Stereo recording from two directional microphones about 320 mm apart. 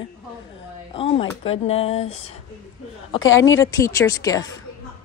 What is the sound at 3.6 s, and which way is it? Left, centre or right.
Speech, centre.